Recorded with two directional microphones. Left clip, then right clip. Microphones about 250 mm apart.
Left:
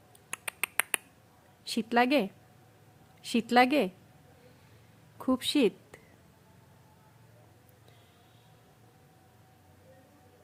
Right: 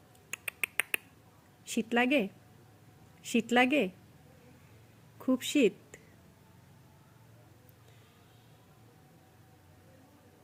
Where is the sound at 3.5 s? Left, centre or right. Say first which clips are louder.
Left 3 dB; centre.